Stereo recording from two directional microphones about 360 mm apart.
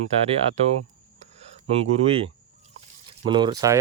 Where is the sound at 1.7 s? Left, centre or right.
Centre.